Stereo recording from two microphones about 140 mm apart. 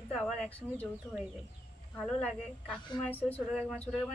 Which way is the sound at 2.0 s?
5° left (ahead or behind).